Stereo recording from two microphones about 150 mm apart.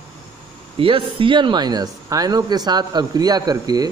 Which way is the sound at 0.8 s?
35° right (ahead or behind).